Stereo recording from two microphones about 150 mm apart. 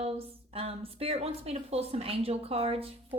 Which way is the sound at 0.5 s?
40° right (ahead or behind).